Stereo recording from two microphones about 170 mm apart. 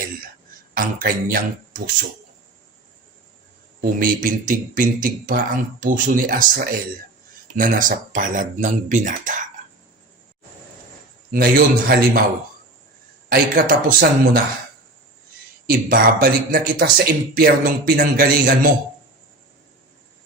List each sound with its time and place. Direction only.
0.7 s speech: 55° right (ahead or behind)
3.8 s speech: 55° right (ahead or behind)
11.3 s speech: 60° right (ahead or behind)
13.3 s speech: 60° right (ahead or behind)
15.6 s speech: 55° right (ahead or behind)